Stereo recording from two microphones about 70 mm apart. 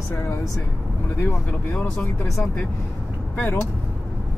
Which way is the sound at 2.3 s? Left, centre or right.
Centre.